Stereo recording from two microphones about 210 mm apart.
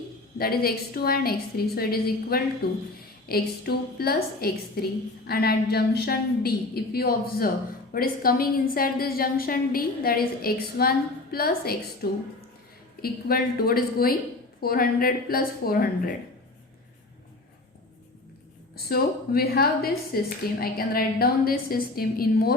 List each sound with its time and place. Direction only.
0.3 s a woman's voice: 45° left (ahead or behind)
18.7 s a woman's voice: 45° left (ahead or behind)